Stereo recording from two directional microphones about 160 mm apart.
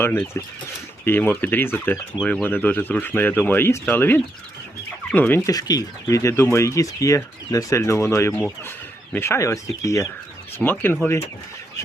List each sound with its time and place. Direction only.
0.0 s speech: 15° left (ahead or behind)